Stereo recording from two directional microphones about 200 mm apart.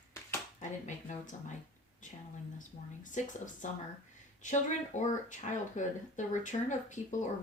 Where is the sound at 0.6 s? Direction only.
40° left (ahead or behind).